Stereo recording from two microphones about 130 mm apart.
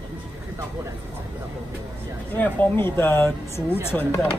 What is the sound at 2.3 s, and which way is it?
Speech, 15° left (ahead or behind).